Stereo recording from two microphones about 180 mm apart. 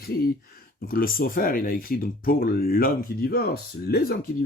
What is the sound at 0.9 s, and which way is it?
Speech, 55° left (ahead or behind).